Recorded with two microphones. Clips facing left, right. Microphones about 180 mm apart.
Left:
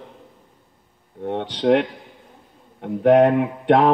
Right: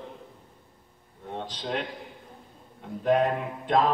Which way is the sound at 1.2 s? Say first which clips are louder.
Left 14 dB; 70° left (ahead or behind).